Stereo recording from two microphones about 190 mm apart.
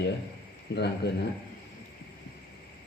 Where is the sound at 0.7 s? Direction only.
60° left (ahead or behind).